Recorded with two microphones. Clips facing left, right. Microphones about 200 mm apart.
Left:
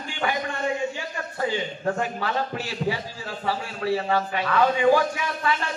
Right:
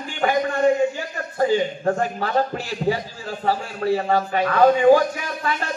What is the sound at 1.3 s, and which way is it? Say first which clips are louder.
A man's voice: right 8 dB; 40° right (ahead or behind).